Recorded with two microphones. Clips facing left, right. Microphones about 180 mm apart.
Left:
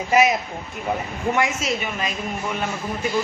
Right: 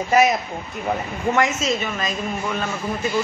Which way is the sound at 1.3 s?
15° left (ahead or behind).